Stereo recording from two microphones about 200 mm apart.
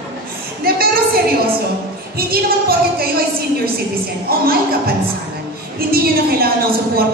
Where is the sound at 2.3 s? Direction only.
50° right (ahead or behind).